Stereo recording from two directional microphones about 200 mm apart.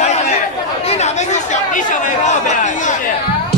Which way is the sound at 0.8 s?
30° left (ahead or behind).